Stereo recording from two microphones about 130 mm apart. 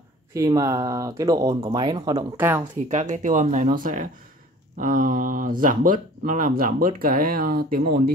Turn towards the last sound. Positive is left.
turn(degrees=-90)